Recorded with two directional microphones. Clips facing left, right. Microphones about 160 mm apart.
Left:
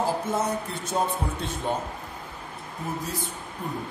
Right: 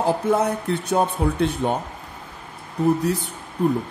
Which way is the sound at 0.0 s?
65° right (ahead or behind).